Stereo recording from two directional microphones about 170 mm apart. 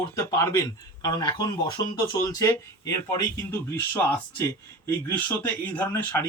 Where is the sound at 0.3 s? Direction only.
20° left (ahead or behind).